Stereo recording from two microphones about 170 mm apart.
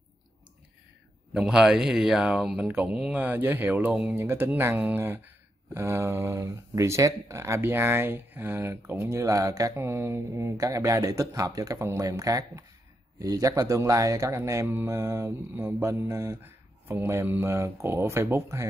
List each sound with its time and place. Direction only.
1.3 s speech: 5° right (ahead or behind)